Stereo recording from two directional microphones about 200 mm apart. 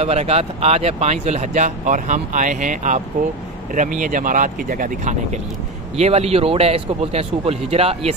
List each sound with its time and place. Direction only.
0.0 s speech: 30° right (ahead or behind)
5.9 s speech: 30° right (ahead or behind)